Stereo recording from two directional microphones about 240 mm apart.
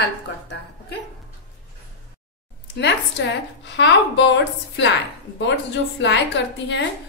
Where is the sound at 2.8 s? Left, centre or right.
Left.